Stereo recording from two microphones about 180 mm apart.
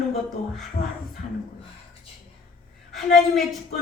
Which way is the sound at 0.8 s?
35° left (ahead or behind).